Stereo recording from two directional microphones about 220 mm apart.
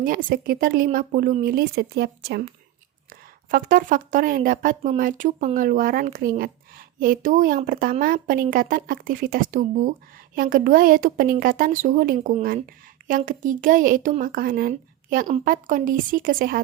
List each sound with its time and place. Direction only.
0.0 s speech: 40° right (ahead or behind)